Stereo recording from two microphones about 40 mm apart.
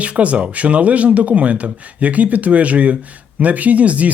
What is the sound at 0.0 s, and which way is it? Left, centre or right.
Speech, right.